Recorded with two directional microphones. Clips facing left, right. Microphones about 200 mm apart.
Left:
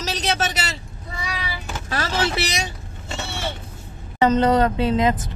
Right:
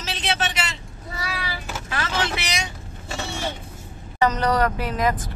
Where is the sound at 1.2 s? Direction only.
5° right (ahead or behind).